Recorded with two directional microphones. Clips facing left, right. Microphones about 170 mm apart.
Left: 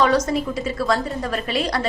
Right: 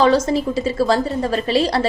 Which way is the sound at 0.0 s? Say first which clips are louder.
Right 3 dB; 30° right (ahead or behind).